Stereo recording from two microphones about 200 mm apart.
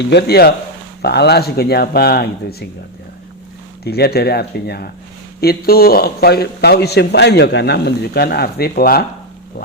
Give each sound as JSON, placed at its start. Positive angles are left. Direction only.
{"t": 0.0, "sound": "a man's voice", "side_deg": 55}
{"t": 3.8, "sound": "a man's voice", "side_deg": 50}